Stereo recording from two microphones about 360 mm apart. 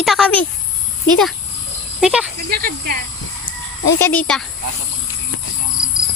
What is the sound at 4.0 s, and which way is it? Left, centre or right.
Speech, centre.